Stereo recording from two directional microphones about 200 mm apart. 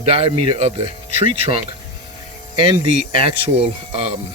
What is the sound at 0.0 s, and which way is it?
Speech, 30° right (ahead or behind).